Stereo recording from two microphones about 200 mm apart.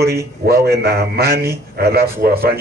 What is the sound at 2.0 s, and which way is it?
Speech, 10° right (ahead or behind).